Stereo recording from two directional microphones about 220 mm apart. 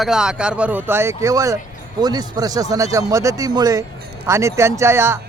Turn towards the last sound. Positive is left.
turn(degrees=-10)  # may be behind; listen again after turning